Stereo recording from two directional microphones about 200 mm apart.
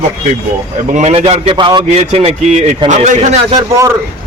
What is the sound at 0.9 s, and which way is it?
A man's voice, 30° right (ahead or behind).